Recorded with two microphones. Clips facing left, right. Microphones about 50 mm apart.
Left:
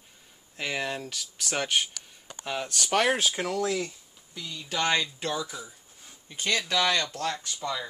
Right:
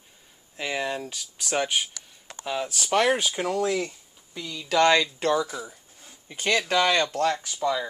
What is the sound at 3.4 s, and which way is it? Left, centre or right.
Speech, right.